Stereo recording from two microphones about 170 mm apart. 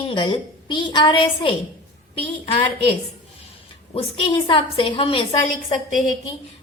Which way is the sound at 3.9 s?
30° left (ahead or behind).